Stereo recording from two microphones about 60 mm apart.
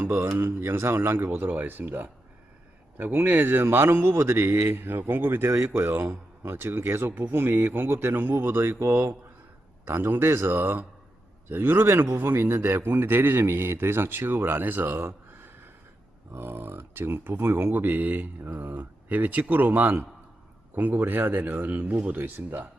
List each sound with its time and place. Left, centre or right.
0.0 s a man's voice: right
14.9 s a sound: right
16.3 s a man's voice: right